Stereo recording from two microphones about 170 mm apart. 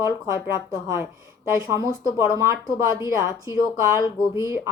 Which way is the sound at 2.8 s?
15° right (ahead or behind).